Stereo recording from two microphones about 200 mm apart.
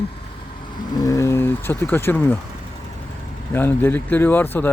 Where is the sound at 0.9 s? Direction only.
15° left (ahead or behind).